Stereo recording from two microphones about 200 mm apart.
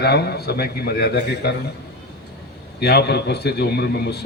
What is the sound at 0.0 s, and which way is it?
A man's voice, 55° left (ahead or behind).